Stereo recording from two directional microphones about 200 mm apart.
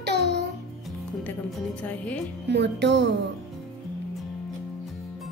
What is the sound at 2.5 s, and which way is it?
Speech, 60° right (ahead or behind).